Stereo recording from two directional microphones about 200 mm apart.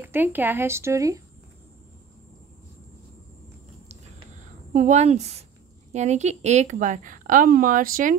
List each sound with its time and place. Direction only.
0.0 s a woman's voice: 10° right (ahead or behind)
4.7 s a woman's voice: 35° right (ahead or behind)